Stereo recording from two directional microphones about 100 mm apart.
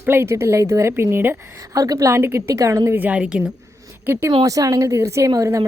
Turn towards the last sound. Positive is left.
turn(degrees=-35)  # may be behind; listen again after turning